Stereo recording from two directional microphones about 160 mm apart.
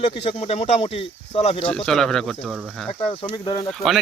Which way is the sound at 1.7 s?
5° left (ahead or behind).